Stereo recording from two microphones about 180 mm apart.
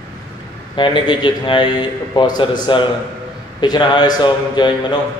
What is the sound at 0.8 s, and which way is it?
A man's voice, 25° left (ahead or behind).